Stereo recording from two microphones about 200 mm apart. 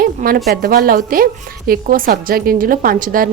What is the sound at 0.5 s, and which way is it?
A woman's voice, 45° right (ahead or behind).